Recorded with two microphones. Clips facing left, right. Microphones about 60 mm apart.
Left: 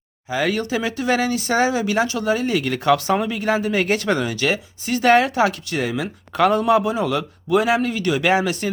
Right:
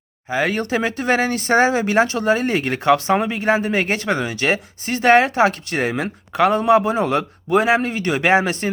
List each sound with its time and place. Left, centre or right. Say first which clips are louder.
0.3 s speech: right 1 dB; right
6.3 s speech: right 1 dB; right